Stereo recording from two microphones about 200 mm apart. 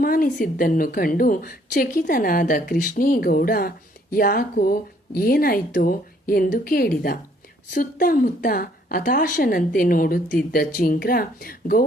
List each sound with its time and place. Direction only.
0.0 s a woman's voice: 45° left (ahead or behind)